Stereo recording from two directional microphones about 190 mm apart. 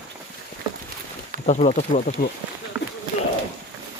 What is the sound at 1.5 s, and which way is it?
Speech, 35° left (ahead or behind).